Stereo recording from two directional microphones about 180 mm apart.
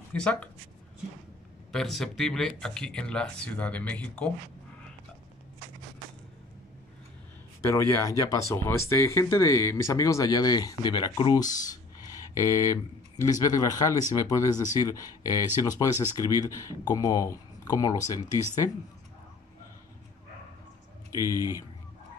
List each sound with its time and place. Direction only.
0.1 s speech: 5° left (ahead or behind)
1.7 s speech: centre (ahead or behind)
7.9 s speech: 15° left (ahead or behind)
21.1 s speech: 20° left (ahead or behind)
21.4 s a man's voice: 15° right (ahead or behind)